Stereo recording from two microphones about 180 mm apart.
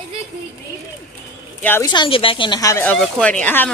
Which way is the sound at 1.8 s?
25° left (ahead or behind).